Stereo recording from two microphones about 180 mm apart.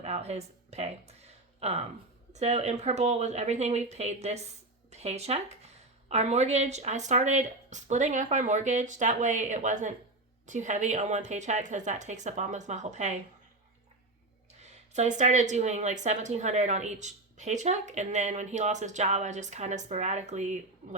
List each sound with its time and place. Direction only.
0.0 s a sound: 35° right (ahead or behind)
2.3 s speech: 40° right (ahead or behind)
14.6 s speech: 40° right (ahead or behind)